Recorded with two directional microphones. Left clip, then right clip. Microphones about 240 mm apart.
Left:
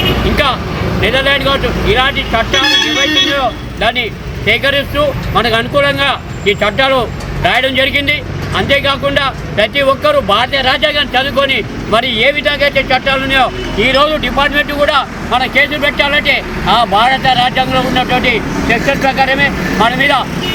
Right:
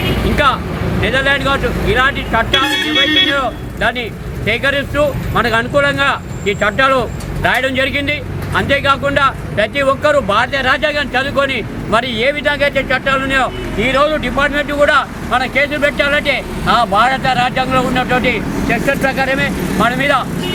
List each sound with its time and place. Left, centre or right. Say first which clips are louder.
1.0 s speech: left 2 dB; centre
3.3 s speech: left 3 dB; centre